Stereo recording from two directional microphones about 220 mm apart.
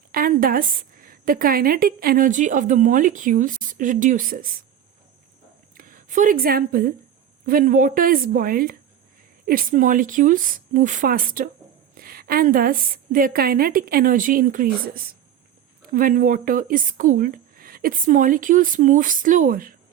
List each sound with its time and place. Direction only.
0.1 s speech: 40° right (ahead or behind)
5.7 s speech: 40° right (ahead or behind)